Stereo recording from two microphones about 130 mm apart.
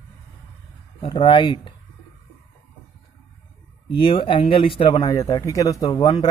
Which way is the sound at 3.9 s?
40° left (ahead or behind).